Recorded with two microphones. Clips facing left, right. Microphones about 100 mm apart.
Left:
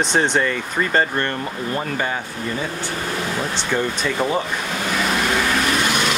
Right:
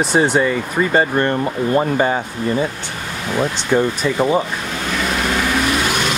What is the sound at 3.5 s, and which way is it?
Speech, 15° right (ahead or behind).